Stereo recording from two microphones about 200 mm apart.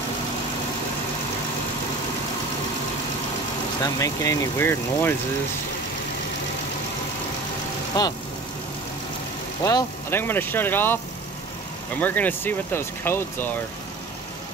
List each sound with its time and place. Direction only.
3.8 s speech: 15° left (ahead or behind)
8.0 s speech: 20° left (ahead or behind)
9.6 s speech: 15° left (ahead or behind)
12.0 s speech: 10° left (ahead or behind)